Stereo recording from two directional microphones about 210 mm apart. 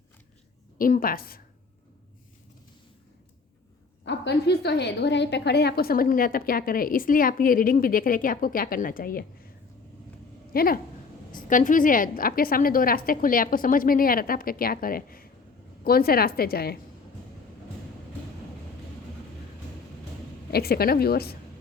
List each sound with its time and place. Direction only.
0.8 s a woman's voice: 40° left (ahead or behind)
4.0 s a woman's voice: 55° left (ahead or behind)
10.5 s a woman's voice: 45° left (ahead or behind)
20.5 s a woman's voice: 45° left (ahead or behind)